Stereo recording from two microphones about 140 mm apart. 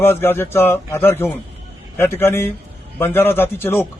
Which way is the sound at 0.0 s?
15° left (ahead or behind).